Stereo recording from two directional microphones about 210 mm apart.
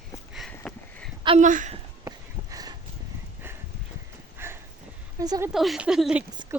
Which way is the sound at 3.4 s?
10° right (ahead or behind).